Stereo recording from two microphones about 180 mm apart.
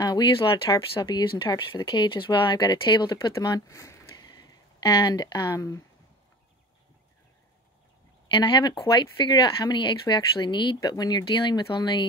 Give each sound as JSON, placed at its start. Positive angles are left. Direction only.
{"t": 0.0, "sound": "speech", "side_deg": 25}
{"t": 8.3, "sound": "speech", "side_deg": 25}